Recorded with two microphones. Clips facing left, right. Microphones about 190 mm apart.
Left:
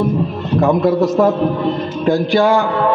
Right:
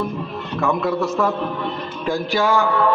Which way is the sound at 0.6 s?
40° left (ahead or behind).